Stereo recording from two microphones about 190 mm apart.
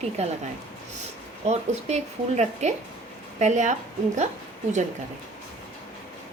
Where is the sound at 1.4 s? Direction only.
35° right (ahead or behind).